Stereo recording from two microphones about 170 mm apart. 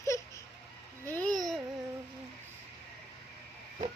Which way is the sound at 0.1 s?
15° left (ahead or behind).